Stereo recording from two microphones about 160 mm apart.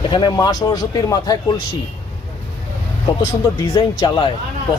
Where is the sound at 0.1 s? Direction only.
25° left (ahead or behind).